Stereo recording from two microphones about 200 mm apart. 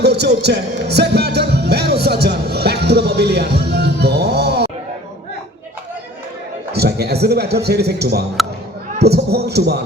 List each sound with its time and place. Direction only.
0.0 s music: 55° right (ahead or behind)
6.7 s a man's voice: 55° right (ahead or behind)